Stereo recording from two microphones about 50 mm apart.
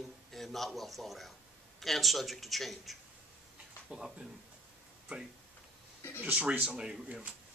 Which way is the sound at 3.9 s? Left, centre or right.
Centre.